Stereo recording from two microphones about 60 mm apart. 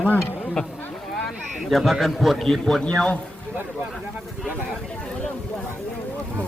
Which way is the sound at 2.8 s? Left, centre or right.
Centre.